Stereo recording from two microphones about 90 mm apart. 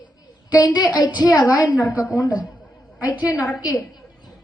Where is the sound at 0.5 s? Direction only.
50° left (ahead or behind).